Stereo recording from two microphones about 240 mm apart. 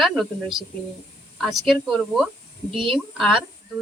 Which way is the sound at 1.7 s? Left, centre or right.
Centre.